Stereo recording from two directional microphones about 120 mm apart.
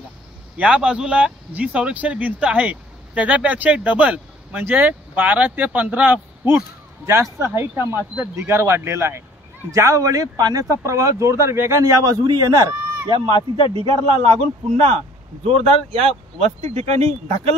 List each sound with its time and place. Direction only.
0.6 s a man's voice: 10° right (ahead or behind); by 12.7 s 30° right (ahead or behind)
13.3 s speech: 45° left (ahead or behind)
13.8 s a man's voice: 50° right (ahead or behind)
15.4 s speech: 55° right (ahead or behind)